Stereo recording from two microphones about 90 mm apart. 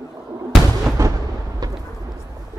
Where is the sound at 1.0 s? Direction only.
35° right (ahead or behind).